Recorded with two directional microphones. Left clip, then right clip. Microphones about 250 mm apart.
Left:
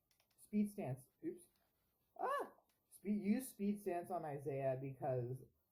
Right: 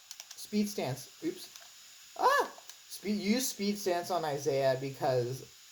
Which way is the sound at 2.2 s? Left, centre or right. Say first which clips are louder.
Right 15 dB; centre.